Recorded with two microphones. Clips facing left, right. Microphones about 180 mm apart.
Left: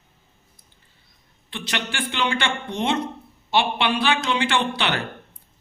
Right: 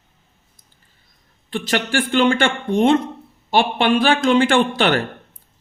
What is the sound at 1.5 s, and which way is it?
Speech, 45° right (ahead or behind).